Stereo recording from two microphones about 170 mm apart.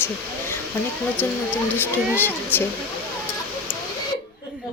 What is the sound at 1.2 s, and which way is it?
Speech, 10° left (ahead or behind).